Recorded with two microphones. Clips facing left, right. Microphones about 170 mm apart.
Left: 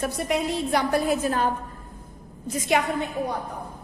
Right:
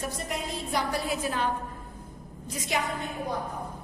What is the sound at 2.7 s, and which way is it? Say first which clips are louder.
Speech: left 6 dB; 65° left (ahead or behind).